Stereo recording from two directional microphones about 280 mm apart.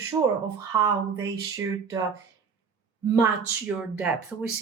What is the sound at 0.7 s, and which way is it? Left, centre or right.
Speech, centre.